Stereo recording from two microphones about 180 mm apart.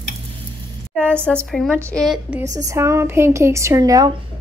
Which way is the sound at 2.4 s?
20° right (ahead or behind).